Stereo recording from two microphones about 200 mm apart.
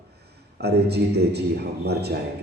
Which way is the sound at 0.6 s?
55° right (ahead or behind).